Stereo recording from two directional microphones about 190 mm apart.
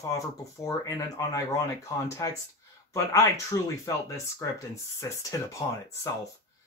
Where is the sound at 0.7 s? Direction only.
20° left (ahead or behind).